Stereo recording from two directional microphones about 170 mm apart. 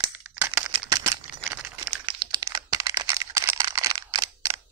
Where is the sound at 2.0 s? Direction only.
25° right (ahead or behind).